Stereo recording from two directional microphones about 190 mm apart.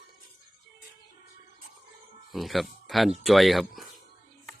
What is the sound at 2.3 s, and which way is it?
Speech, centre (ahead or behind).